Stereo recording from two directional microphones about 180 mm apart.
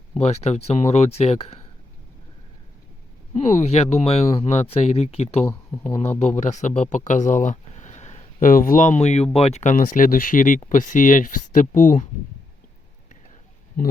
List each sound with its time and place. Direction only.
0.2 s speech: 35° left (ahead or behind)
3.3 s speech: 35° left (ahead or behind)
5.5 s speech: 15° left (ahead or behind)
6.0 s speech: 40° left (ahead or behind)
13.7 s speech: 50° left (ahead or behind)